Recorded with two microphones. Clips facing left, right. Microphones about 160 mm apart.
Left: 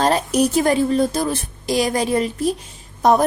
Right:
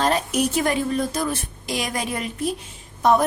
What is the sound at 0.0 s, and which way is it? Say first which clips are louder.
A woman's voice: left 4 dB; 35° left (ahead or behind).